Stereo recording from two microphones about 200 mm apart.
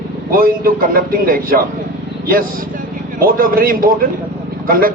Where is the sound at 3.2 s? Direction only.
45° right (ahead or behind).